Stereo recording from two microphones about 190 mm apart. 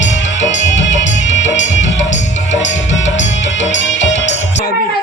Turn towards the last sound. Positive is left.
turn(degrees=75)  # may be behind; listen again after turning